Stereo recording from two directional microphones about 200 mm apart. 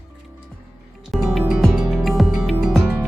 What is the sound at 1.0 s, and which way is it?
Music, centre (ahead or behind).